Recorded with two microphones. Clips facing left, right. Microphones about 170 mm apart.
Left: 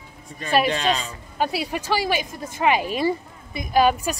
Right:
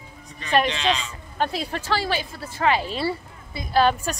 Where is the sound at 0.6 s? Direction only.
45° left (ahead or behind).